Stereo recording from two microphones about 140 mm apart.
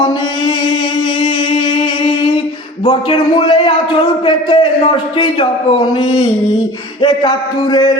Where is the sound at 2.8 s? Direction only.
35° left (ahead or behind).